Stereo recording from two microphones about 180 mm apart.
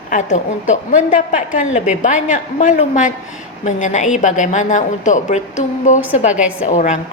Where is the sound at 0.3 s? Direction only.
45° left (ahead or behind).